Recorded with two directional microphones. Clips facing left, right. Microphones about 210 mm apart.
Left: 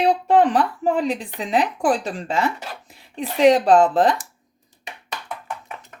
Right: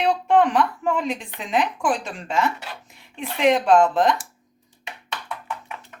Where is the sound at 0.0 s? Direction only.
35° left (ahead or behind).